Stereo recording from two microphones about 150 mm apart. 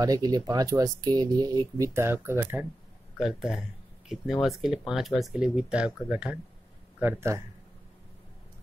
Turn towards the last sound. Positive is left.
turn(degrees=-20)  # may be behind; listen again after turning